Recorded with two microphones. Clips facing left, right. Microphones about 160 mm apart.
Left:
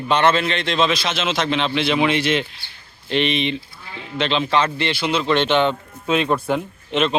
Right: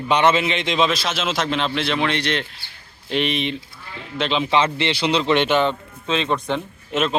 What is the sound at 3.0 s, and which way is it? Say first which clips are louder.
Speech: left 2 dB; 5° right (ahead or behind).